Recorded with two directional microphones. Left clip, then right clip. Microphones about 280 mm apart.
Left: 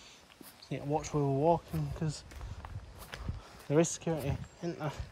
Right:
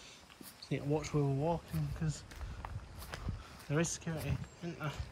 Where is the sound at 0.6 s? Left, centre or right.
Centre.